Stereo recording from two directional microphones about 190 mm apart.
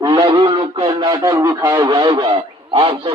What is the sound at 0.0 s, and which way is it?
Radio, 20° right (ahead or behind).